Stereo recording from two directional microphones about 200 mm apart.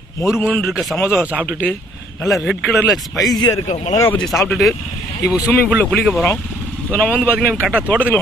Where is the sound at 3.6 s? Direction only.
35° left (ahead or behind).